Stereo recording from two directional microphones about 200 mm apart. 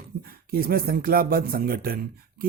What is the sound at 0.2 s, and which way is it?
Speech, 50° right (ahead or behind).